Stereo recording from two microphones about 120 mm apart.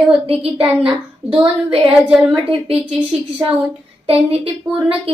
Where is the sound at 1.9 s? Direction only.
5° right (ahead or behind).